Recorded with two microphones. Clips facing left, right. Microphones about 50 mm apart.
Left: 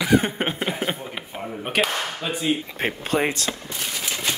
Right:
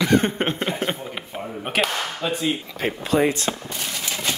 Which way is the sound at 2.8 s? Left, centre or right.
Left.